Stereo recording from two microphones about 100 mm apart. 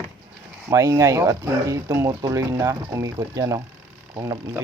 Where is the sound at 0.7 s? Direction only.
40° right (ahead or behind).